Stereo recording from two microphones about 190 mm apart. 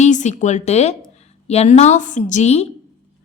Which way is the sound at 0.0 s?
40° left (ahead or behind).